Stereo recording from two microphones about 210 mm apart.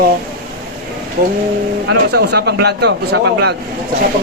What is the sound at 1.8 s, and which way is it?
Speech, 50° right (ahead or behind).